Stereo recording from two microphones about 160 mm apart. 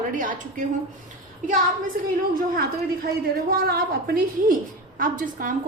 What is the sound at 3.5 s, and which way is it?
A woman's voice, 70° right (ahead or behind).